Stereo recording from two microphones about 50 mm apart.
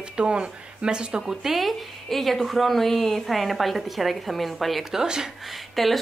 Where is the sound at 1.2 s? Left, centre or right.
Centre.